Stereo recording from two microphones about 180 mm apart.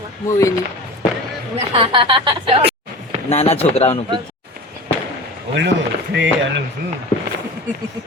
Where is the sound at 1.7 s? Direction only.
30° right (ahead or behind).